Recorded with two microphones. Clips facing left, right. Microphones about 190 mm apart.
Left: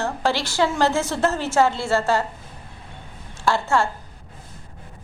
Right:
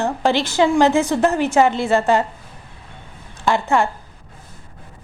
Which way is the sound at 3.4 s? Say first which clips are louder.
Right 3 dB; 15° right (ahead or behind).